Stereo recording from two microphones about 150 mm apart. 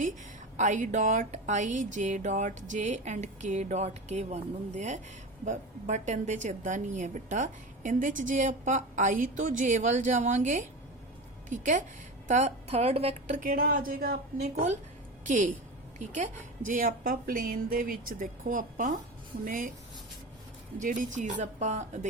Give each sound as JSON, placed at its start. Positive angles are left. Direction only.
{"t": 0.5, "sound": "a woman's voice", "side_deg": -55}
{"t": 12.3, "sound": "a woman's voice", "side_deg": -45}
{"t": 15.3, "sound": "a woman's voice", "side_deg": -55}
{"t": 20.7, "sound": "a woman's voice", "side_deg": -60}